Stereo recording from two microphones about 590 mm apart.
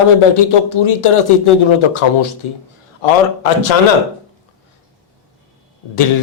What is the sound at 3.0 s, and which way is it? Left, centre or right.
Speech, left.